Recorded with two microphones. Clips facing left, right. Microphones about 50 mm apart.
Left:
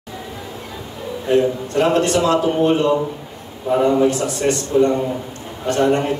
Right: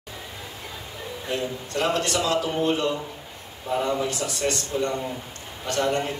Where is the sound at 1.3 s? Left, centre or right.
Left.